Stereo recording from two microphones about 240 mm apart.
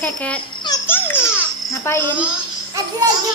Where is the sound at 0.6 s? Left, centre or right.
Centre.